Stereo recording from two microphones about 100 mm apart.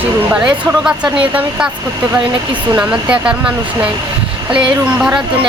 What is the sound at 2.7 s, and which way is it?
Speech, 10° right (ahead or behind).